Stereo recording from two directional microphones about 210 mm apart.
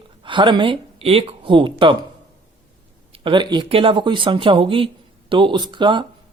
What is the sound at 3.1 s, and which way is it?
Speech, 25° right (ahead or behind).